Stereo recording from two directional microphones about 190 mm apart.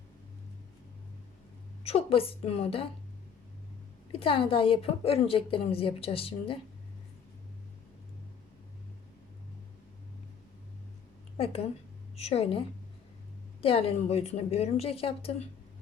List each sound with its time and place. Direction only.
1.8 s a woman's voice: 30° left (ahead or behind)
4.1 s a woman's voice: 30° left (ahead or behind)
11.3 s a woman's voice: 30° left (ahead or behind)